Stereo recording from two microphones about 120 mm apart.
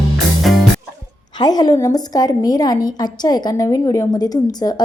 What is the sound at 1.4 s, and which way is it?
A woman's voice, 35° left (ahead or behind).